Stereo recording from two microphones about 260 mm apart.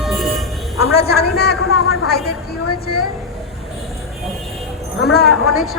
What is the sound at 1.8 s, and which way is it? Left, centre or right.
Speech, left.